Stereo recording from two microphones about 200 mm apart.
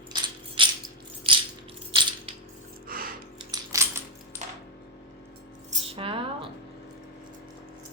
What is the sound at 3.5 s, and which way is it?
Typing, 15° right (ahead or behind).